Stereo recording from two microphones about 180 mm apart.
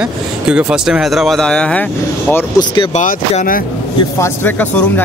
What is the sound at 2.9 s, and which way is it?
Speech, 45° left (ahead or behind).